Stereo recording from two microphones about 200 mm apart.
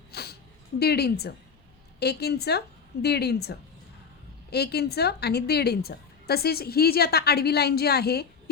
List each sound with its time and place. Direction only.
0.1 s a sound: 55° left (ahead or behind)
0.8 s a woman's voice: 55° left (ahead or behind)
4.5 s a woman's voice: 55° left (ahead or behind)